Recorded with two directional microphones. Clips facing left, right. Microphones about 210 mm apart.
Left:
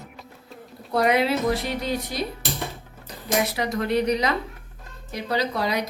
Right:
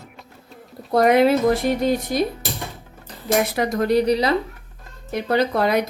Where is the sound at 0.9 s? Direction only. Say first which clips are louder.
Right 6 dB; 45° right (ahead or behind).